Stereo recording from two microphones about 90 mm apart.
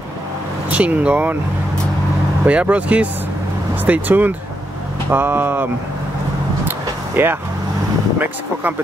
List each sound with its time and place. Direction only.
0.7 s speech: 15° right (ahead or behind)
2.4 s speech: 15° right (ahead or behind)
7.2 s speech: 20° right (ahead or behind)